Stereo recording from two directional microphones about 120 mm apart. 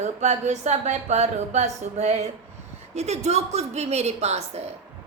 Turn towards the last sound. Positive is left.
turn(degrees=-65)  # may be behind; listen again after turning